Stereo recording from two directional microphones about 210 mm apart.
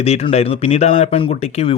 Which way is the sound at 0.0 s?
30° left (ahead or behind).